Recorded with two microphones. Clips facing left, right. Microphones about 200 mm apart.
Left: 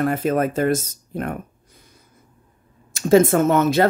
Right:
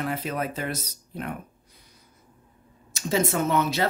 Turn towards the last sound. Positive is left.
turn(degrees=50)  # may be behind; listen again after turning